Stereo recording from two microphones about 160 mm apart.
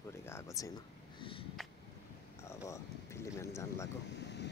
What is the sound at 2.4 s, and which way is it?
Speech, 20° left (ahead or behind).